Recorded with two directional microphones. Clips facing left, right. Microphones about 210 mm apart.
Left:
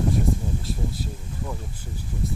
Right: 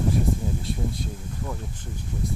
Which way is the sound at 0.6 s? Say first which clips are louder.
Right 1 dB; centre (ahead or behind).